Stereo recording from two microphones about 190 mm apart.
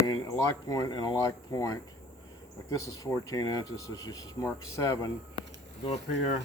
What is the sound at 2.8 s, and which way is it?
Speech, 15° left (ahead or behind).